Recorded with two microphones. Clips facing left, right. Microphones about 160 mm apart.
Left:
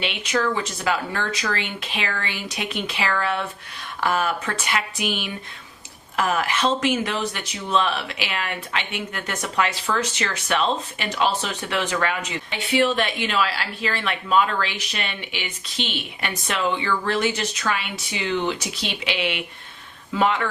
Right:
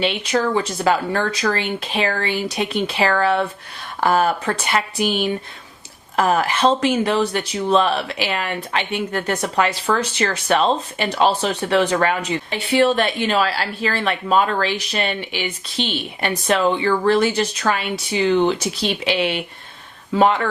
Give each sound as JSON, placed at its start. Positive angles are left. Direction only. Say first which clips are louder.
{"t": 0.0, "sound": "speech", "louder": "right 4 dB", "side_deg": -35}